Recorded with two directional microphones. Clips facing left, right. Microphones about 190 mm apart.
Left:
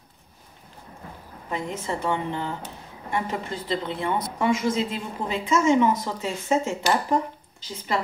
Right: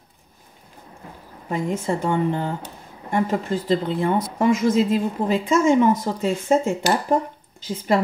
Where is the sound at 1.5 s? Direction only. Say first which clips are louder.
Right 6 dB; 45° right (ahead or behind).